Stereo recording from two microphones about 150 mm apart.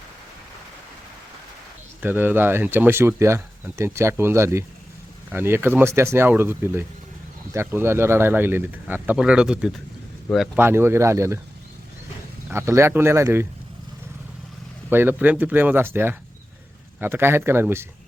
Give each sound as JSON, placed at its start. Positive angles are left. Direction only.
{"t": 2.0, "sound": "speech", "side_deg": -15}
{"t": 10.6, "sound": "speech", "side_deg": -15}
{"t": 12.5, "sound": "speech", "side_deg": -15}
{"t": 14.8, "sound": "speech", "side_deg": -15}